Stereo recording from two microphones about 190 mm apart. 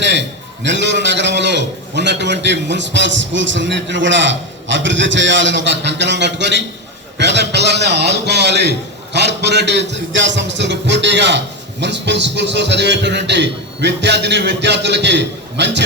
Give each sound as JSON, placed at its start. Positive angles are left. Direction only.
{"t": 0.0, "sound": "a man's voice", "side_deg": -70}
{"t": 7.2, "sound": "music", "side_deg": -65}